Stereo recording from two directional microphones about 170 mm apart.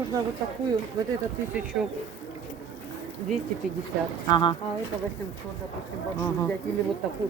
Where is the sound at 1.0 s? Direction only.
20° right (ahead or behind).